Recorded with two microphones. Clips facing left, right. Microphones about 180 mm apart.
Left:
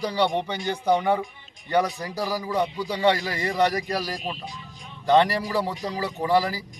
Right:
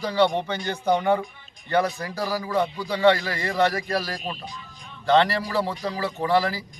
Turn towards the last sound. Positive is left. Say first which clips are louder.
# even
turn(degrees=15)  # may be behind; listen again after turning